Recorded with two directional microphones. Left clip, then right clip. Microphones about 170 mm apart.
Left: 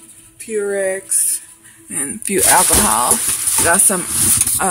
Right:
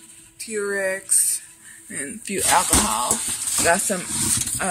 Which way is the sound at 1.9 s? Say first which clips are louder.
Left 7 dB; 35° left (ahead or behind).